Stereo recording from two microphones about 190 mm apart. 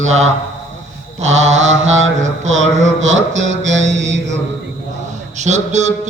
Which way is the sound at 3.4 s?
75° right (ahead or behind).